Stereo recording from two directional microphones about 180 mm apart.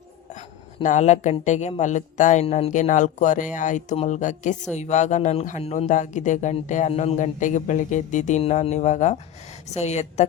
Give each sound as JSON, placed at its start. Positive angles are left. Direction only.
{"t": 0.3, "sound": "speech", "side_deg": 40}